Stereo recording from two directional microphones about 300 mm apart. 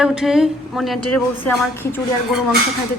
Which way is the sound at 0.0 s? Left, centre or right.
Centre.